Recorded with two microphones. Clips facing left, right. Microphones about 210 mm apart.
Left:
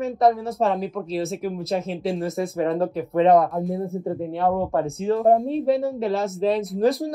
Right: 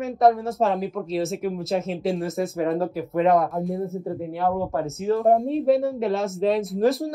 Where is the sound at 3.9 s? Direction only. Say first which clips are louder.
Left 2 dB; 25° left (ahead or behind).